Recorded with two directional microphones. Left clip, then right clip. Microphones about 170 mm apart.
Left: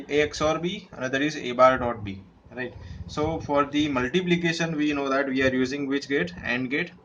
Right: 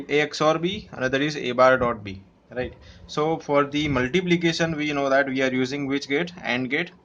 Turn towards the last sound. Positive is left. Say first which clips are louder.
# right 2 dB
turn(degrees=-40)  # may be behind; listen again after turning